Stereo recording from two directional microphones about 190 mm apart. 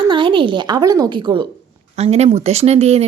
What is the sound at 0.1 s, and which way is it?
A woman's voice, 25° right (ahead or behind).